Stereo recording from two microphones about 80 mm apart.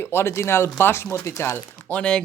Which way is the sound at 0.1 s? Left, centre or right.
Left.